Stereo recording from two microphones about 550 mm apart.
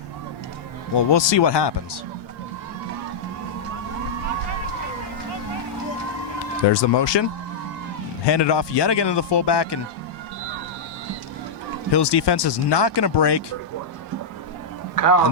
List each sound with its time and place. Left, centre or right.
0.9 s a man's voice: left
6.7 s a man's voice: left
8.3 s a man's voice: left
11.9 s a man's voice: left
14.9 s speech: left